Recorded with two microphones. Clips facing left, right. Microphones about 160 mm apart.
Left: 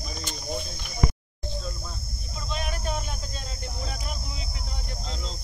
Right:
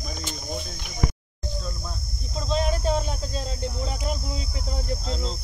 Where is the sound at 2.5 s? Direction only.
30° right (ahead or behind).